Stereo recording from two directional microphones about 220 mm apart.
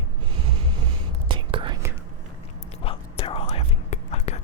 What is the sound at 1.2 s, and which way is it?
Whispering, 25° right (ahead or behind).